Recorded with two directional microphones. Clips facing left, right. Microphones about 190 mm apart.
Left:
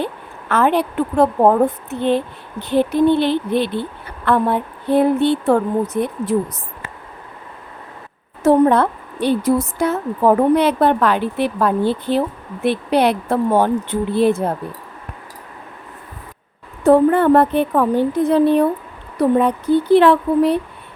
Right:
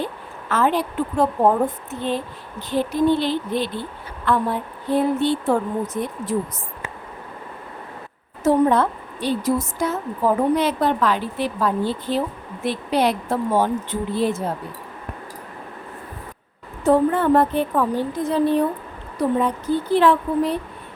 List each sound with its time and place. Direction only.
0.0 s a woman's voice: 60° left (ahead or behind)
8.4 s a woman's voice: 65° left (ahead or behind)
16.8 s a woman's voice: 60° left (ahead or behind)